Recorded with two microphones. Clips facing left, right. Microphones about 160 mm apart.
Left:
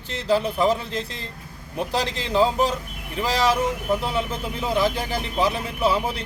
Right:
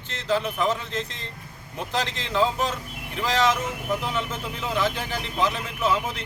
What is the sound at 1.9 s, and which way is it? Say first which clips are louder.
Speech: left 3 dB; 10° left (ahead or behind).